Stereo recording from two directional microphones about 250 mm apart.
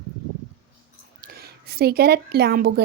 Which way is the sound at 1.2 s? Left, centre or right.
Right.